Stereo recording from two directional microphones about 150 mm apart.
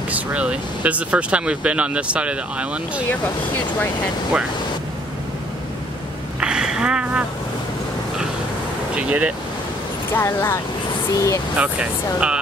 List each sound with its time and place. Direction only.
0.1 s speech: 10° right (ahead or behind)
6.4 s a sound: 5° right (ahead or behind)
8.9 s speech: 10° right (ahead or behind)
10.1 s speech: 15° left (ahead or behind)
11.5 s speech: 10° right (ahead or behind)